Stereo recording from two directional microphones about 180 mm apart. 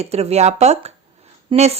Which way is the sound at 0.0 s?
35° right (ahead or behind).